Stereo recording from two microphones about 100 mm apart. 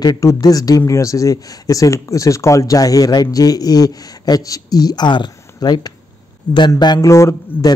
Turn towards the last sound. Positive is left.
turn(degrees=30)  # may be behind; listen again after turning